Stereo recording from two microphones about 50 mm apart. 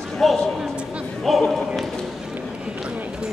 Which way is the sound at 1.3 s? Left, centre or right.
Centre.